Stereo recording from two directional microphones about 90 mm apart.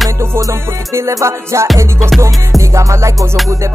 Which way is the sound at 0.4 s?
35° right (ahead or behind).